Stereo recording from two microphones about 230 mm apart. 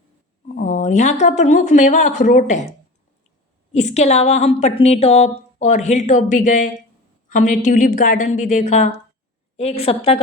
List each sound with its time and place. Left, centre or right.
0.4 s a sound: left
1.2 s a woman's voice: left
3.7 s a woman's voice: left